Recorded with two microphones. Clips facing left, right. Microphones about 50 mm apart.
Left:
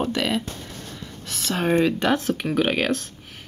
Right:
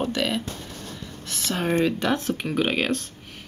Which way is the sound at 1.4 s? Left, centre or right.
Centre.